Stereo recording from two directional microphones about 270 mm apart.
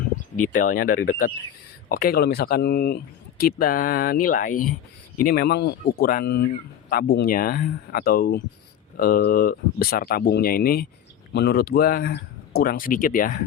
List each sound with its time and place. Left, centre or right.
0.3 s speech: left